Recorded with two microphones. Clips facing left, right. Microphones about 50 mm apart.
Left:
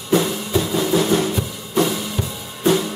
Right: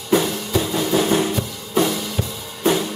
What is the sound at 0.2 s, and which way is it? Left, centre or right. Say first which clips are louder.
Drum: even; centre.